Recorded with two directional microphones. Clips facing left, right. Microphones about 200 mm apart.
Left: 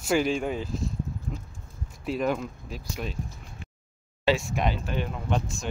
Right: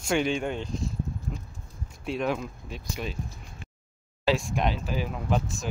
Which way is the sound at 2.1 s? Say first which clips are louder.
Left 1 dB; centre (ahead or behind).